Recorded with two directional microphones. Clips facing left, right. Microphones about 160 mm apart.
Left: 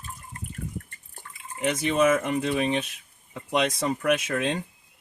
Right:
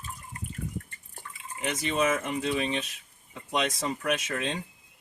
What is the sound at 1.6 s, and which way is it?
Speech, 55° left (ahead or behind).